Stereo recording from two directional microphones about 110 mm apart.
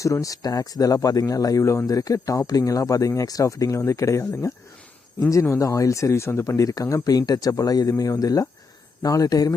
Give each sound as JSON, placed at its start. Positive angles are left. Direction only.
{"t": 0.0, "sound": "speech", "side_deg": 30}